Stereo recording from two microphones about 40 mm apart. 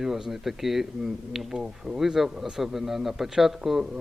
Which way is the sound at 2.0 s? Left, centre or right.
Centre.